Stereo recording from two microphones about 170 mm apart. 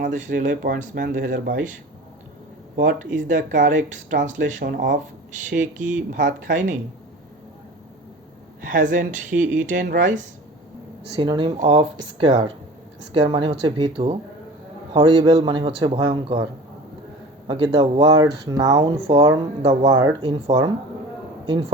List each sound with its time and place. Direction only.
0.1 s speech: 50° right (ahead or behind)
4.6 s speech: 65° right (ahead or behind)
5.5 s speech: 50° right (ahead or behind)
8.7 s speech: 50° right (ahead or behind)
11.2 s a man's voice: 30° right (ahead or behind)
11.5 s a man's voice: 40° right (ahead or behind); by 18.9 s 25° right (ahead or behind)
19.0 s speech: 35° right (ahead or behind)
19.9 s a man's voice: 25° right (ahead or behind)